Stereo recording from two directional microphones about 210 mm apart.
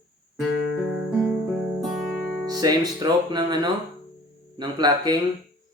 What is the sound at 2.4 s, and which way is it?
Speech, 20° right (ahead or behind).